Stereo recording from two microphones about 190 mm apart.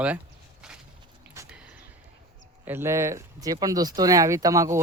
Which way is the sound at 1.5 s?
5° right (ahead or behind).